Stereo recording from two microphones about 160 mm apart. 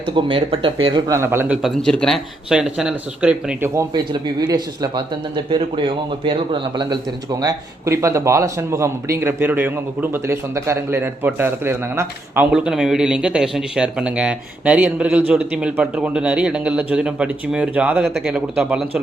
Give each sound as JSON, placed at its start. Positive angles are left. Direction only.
{"t": 0.0, "sound": "speech", "side_deg": -35}
{"t": 1.6, "sound": "a man's voice", "side_deg": 5}
{"t": 3.9, "sound": "a man's voice", "side_deg": -25}